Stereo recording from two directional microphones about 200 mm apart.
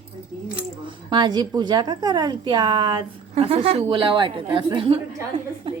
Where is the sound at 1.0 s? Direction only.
20° right (ahead or behind).